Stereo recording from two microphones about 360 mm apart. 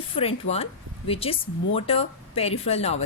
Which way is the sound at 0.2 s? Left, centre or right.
Centre.